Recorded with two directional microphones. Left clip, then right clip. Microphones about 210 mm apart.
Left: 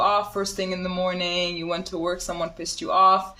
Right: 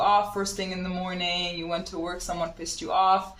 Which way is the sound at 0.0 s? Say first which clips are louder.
Left 1 dB; 55° left (ahead or behind).